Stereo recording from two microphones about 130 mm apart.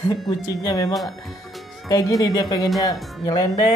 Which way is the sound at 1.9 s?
25° left (ahead or behind).